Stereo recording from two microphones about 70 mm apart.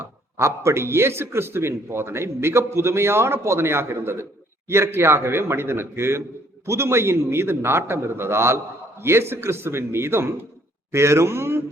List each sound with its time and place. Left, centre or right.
0.0 s a man's voice: right